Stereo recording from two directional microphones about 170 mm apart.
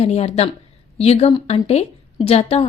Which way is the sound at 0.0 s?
40° left (ahead or behind).